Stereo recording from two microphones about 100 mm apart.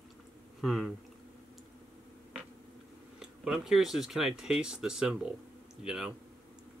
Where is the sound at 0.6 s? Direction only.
Centre (ahead or behind).